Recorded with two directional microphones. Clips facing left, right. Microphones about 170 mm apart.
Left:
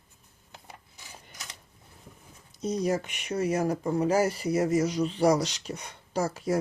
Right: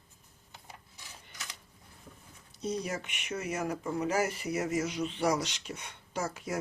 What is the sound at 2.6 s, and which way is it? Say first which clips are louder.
Speech: left 7 dB; 40° left (ahead or behind).